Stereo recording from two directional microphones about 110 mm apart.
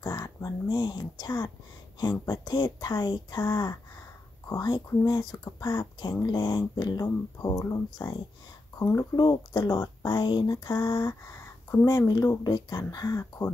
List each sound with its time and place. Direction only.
0.0 s speech: 35° left (ahead or behind)
12.3 s speech: 40° left (ahead or behind)